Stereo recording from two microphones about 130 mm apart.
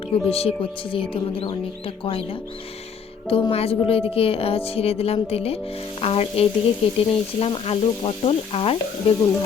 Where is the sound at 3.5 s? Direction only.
50° left (ahead or behind).